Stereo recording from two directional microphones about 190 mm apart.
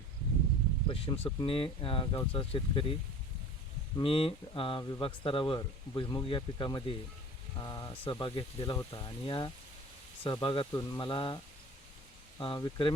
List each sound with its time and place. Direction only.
0.9 s speech: 30° left (ahead or behind)
3.9 s speech: 30° left (ahead or behind)
12.4 s speech: 25° left (ahead or behind)